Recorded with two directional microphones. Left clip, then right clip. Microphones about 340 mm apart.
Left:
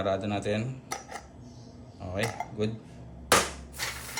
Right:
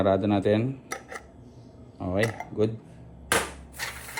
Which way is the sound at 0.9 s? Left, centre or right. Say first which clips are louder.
Right 1 dB; centre.